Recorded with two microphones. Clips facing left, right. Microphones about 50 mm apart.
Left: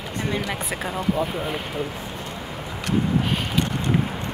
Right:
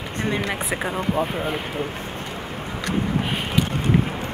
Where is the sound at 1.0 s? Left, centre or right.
Right.